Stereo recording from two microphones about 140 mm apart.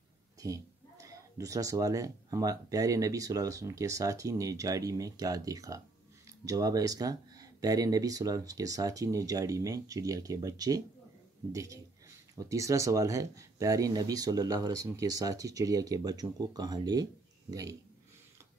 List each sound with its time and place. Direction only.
0.4 s speech: 25° right (ahead or behind)